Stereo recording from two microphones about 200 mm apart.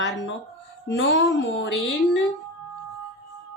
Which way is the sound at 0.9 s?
65° left (ahead or behind).